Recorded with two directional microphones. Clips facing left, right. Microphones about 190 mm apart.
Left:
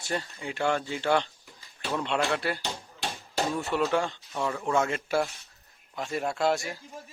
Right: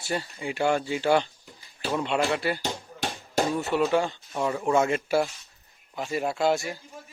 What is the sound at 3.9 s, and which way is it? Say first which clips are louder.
Speech: right 3 dB; centre (ahead or behind).